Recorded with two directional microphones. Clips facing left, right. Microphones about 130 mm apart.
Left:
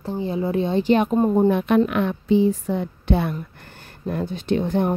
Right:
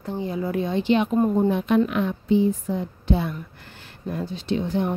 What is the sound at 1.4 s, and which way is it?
A woman's voice, 60° left (ahead or behind).